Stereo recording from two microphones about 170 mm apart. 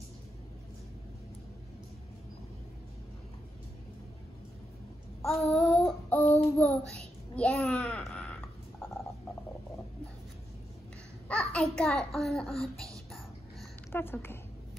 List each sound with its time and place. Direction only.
5.2 s child singing: centre (ahead or behind)
6.2 s child singing: 40° left (ahead or behind)
6.9 s a sound: 5° left (ahead or behind)
11.2 s a child's voice: 5° left (ahead or behind)